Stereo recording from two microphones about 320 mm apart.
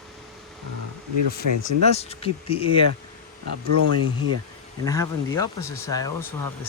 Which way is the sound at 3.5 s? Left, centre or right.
Right.